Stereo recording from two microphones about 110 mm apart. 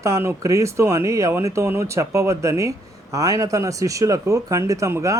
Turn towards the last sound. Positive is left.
turn(degrees=-30)  # may be behind; listen again after turning